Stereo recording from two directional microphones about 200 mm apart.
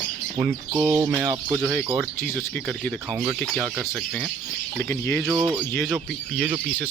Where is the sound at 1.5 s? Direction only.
5° right (ahead or behind).